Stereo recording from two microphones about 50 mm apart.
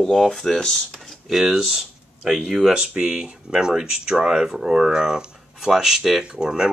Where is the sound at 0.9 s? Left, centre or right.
Centre.